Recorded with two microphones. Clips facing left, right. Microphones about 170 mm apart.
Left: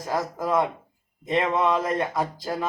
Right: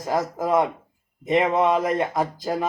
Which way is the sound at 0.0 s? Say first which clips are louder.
Right 3 dB; 20° right (ahead or behind).